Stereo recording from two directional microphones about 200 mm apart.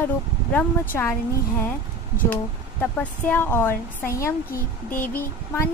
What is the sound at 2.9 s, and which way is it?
Speech, 10° left (ahead or behind).